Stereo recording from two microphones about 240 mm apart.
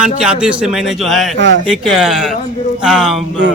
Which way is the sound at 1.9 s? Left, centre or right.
Centre.